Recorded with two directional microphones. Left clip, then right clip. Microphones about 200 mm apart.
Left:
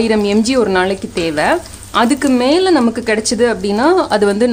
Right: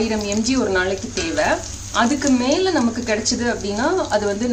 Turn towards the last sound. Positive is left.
turn(degrees=50)  # may be behind; listen again after turning